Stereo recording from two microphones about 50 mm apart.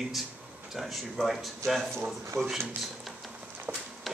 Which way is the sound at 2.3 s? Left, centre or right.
Right.